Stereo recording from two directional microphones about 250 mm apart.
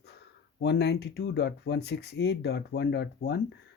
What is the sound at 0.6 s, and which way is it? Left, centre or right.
Speech, left.